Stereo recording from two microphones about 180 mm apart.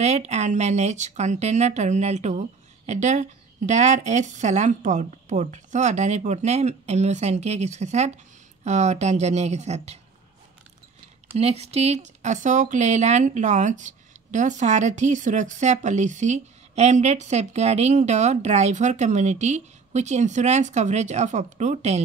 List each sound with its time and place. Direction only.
0.0 s speech: 40° right (ahead or behind)
11.3 s speech: 35° right (ahead or behind)